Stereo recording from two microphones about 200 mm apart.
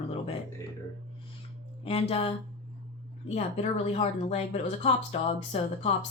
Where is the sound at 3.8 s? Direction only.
30° left (ahead or behind).